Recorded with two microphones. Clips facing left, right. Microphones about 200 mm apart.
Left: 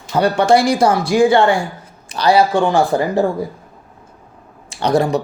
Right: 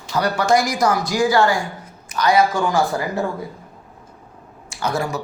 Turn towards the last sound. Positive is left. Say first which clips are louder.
# left 8 dB
turn(degrees=35)  # may be behind; listen again after turning